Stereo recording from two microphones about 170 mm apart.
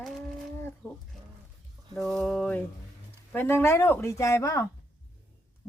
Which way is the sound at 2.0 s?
Centre (ahead or behind).